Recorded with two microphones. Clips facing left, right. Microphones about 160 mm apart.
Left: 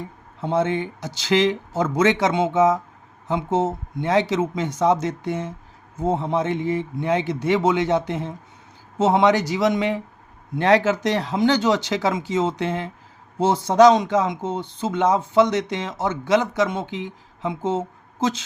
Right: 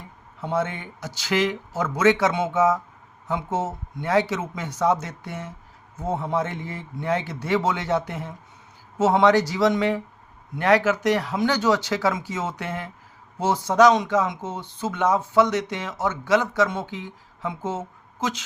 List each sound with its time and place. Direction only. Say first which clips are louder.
0.4 s speech: left 5 dB; 25° left (ahead or behind)